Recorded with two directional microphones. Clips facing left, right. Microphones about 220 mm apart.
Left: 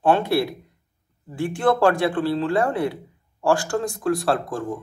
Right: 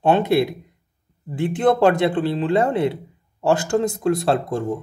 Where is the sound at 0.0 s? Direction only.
20° right (ahead or behind).